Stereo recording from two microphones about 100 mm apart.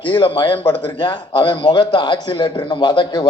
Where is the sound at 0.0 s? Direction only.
55° left (ahead or behind).